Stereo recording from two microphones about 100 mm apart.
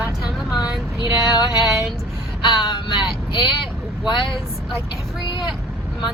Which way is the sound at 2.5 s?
50° left (ahead or behind).